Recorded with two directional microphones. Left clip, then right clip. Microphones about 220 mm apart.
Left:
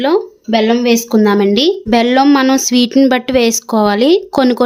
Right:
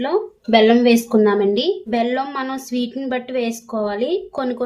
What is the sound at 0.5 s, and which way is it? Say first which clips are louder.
Speech: left 1 dB; 25° left (ahead or behind).